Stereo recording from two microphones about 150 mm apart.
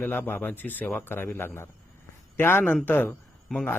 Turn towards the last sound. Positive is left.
turn(degrees=5)  # may be behind; listen again after turning